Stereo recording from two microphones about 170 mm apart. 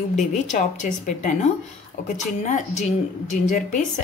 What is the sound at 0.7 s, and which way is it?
A woman's voice, 45° left (ahead or behind).